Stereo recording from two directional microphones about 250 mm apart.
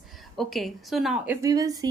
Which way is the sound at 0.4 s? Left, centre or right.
Centre.